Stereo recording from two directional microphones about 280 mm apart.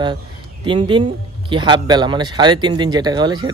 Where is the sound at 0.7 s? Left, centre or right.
Centre.